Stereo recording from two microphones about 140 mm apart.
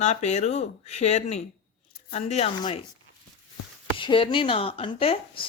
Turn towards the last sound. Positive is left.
turn(degrees=40)  # may be behind; listen again after turning